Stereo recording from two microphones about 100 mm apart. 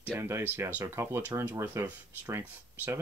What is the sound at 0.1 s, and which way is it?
Speech, 25° right (ahead or behind).